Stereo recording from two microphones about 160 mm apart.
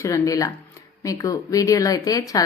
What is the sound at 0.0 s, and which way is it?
A woman's voice, 20° left (ahead or behind).